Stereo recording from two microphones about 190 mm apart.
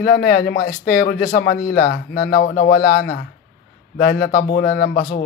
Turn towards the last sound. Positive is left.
turn(degrees=50)  # may be behind; listen again after turning